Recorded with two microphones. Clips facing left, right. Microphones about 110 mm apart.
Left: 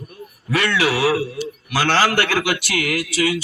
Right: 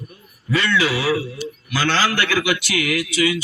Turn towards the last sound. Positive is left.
turn(degrees=45)  # may be behind; listen again after turning